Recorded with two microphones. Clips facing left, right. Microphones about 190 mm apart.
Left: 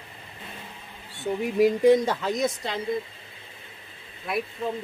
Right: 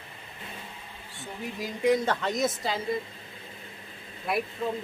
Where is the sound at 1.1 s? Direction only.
65° left (ahead or behind).